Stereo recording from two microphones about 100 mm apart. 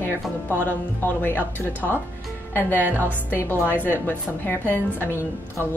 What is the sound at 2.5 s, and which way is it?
A woman's voice, 20° left (ahead or behind).